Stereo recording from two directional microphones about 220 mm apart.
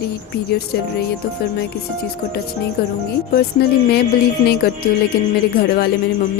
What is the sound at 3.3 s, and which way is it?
A woman's voice, 45° left (ahead or behind).